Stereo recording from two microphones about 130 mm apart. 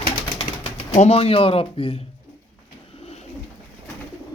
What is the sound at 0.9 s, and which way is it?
Speech, 55° left (ahead or behind).